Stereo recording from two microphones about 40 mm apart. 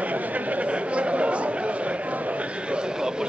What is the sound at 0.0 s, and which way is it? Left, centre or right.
Chatter, right.